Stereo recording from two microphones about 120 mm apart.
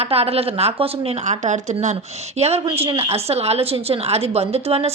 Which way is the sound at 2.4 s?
65° right (ahead or behind).